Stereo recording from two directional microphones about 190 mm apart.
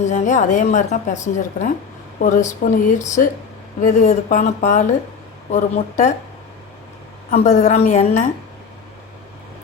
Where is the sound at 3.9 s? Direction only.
40° left (ahead or behind).